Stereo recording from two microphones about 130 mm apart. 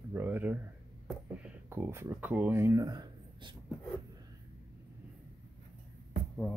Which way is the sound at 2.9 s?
35° right (ahead or behind).